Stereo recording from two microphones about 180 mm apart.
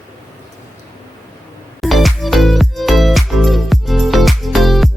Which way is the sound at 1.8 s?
Centre (ahead or behind).